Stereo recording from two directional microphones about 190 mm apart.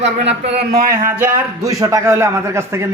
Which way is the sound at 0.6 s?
55° right (ahead or behind).